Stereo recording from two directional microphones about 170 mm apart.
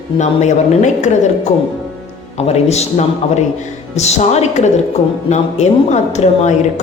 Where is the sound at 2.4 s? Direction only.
40° left (ahead or behind).